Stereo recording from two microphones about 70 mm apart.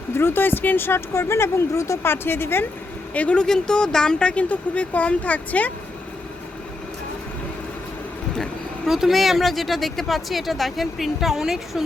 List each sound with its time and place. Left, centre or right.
0.1 s speech: left
2.2 s speech: left
3.2 s speech: centre
8.9 s speech: centre